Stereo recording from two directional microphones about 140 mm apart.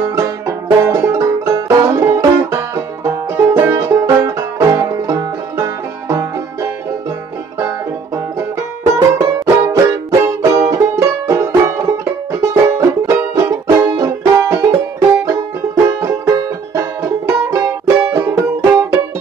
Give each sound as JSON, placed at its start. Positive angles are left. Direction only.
{"t": 0.0, "sound": "banjo", "side_deg": -20}
{"t": 8.4, "sound": "music", "side_deg": -25}